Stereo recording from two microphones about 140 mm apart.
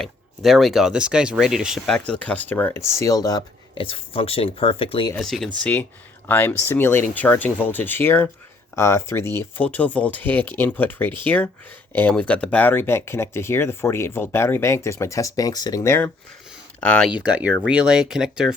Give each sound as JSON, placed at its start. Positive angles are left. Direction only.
{"t": 0.0, "sound": "speech", "side_deg": 0}
{"t": 2.0, "sound": "speech", "side_deg": 10}
{"t": 3.8, "sound": "speech", "side_deg": 40}
{"t": 5.2, "sound": "speech", "side_deg": 0}
{"t": 17.1, "sound": "speech", "side_deg": -10}